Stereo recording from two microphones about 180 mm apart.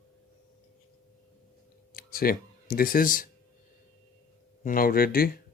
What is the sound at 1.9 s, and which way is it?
Speech, 55° left (ahead or behind).